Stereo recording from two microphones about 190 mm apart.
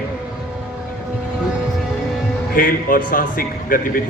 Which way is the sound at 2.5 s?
50° left (ahead or behind).